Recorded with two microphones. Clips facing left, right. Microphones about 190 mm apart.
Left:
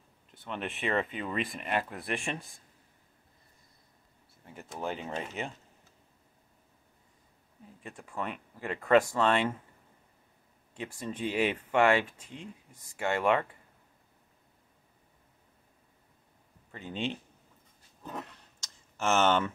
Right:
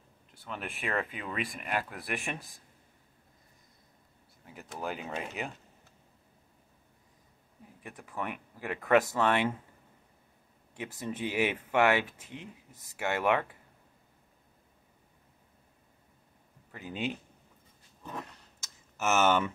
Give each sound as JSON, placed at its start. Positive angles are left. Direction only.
{"t": 0.4, "sound": "speech", "side_deg": -5}
{"t": 4.5, "sound": "speech", "side_deg": -5}
{"t": 8.2, "sound": "speech", "side_deg": -15}
{"t": 11.0, "sound": "speech", "side_deg": -20}
{"t": 16.7, "sound": "speech", "side_deg": -10}
{"t": 18.9, "sound": "speech", "side_deg": -5}